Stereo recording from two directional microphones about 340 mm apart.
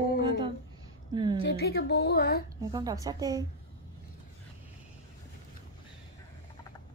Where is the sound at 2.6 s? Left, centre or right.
Centre.